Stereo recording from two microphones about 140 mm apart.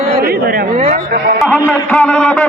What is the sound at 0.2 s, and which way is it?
Chatter, 90° right.